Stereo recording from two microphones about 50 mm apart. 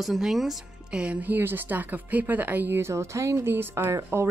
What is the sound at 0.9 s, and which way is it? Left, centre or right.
Speech, right.